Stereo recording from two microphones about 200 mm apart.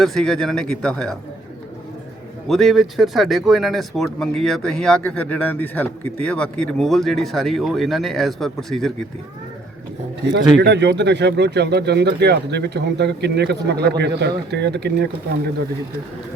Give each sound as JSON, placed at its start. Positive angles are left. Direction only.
{"t": 0.0, "sound": "speech", "side_deg": 0}
{"t": 2.5, "sound": "speech", "side_deg": 0}
{"t": 10.6, "sound": "speech", "side_deg": -60}